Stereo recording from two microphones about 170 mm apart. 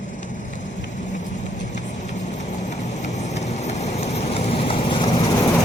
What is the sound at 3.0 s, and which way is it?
Vehicle, 45° left (ahead or behind).